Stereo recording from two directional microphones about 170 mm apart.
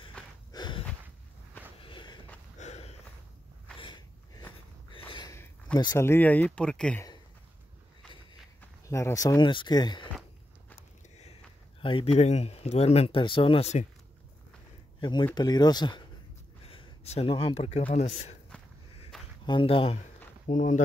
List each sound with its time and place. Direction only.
0.5 s a sound: 25° left (ahead or behind)
1.8 s walk: 30° left (ahead or behind)
2.6 s walk: 40° left (ahead or behind)
3.7 s a sound: 30° left (ahead or behind)
5.3 s a sound: 15° left (ahead or behind)
5.8 s speech: 20° left (ahead or behind)
8.5 s speech: 15° left (ahead or behind)
11.8 s speech: 35° left (ahead or behind)
15.0 s speech: 25° left (ahead or behind)
19.4 s speech: 30° left (ahead or behind)
20.4 s speech: 50° left (ahead or behind)